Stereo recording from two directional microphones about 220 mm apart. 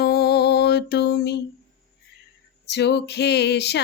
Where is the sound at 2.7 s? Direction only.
50° left (ahead or behind).